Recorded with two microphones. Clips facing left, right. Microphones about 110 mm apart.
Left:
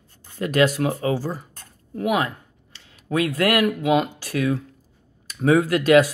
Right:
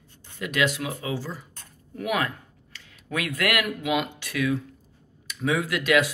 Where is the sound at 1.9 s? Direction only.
25° left (ahead or behind).